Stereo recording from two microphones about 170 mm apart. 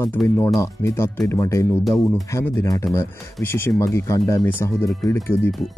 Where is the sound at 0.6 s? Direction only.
15° left (ahead or behind).